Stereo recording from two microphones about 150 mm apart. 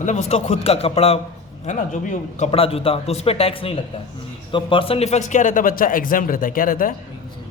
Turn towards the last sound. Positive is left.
turn(degrees=70)  # may be behind; listen again after turning